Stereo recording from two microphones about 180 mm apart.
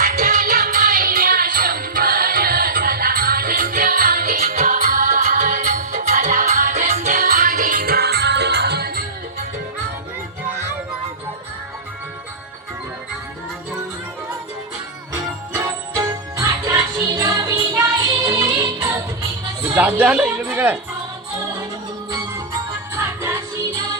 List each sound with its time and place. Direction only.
0.0 s music: 45° right (ahead or behind); by 9.0 s 60° right (ahead or behind)
15.1 s music: 15° right (ahead or behind)
19.7 s a sound: 10° right (ahead or behind)
23.0 s music: 15° right (ahead or behind)